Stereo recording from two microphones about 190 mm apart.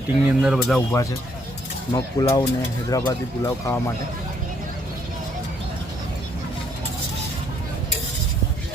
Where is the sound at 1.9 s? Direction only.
15° left (ahead or behind).